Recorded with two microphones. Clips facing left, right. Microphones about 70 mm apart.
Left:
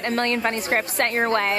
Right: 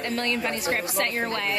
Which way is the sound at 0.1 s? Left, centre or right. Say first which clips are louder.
Left 5 dB; left.